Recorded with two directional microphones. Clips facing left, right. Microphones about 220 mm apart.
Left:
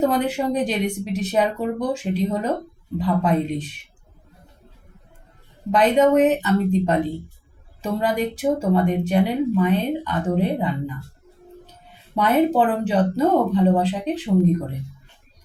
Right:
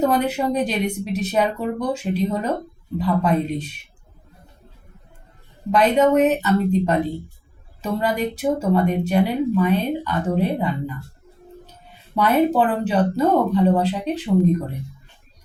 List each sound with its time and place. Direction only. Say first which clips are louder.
0.0 s a woman's voice: right 1 dB; 15° left (ahead or behind)
5.7 s a woman's voice: even; 15° left (ahead or behind)
12.2 s a woman's voice: even; 15° left (ahead or behind)